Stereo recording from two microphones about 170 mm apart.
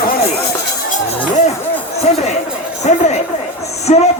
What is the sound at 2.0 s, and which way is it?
Music, 40° left (ahead or behind).